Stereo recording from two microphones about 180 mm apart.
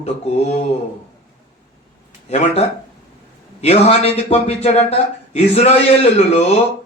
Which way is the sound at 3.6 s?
35° left (ahead or behind).